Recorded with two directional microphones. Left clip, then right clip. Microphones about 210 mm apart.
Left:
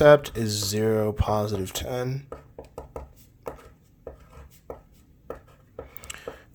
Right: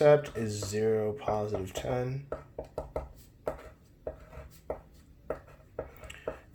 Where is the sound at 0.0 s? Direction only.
35° left (ahead or behind).